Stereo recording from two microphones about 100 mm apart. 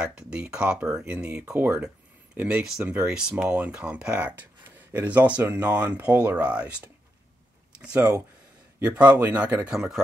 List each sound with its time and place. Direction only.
0.0 s speech: 10° right (ahead or behind)
8.7 s speech: 15° right (ahead or behind)
9.7 s speech: 5° right (ahead or behind)